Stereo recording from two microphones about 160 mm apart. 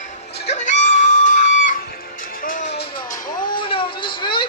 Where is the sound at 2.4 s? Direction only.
60° left (ahead or behind); by 2.8 s 75° left (ahead or behind).